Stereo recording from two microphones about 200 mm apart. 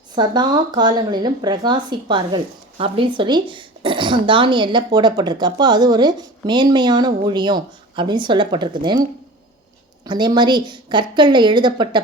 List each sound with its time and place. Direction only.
0.2 s speech: 20° right (ahead or behind)
10.0 s speech: 20° right (ahead or behind)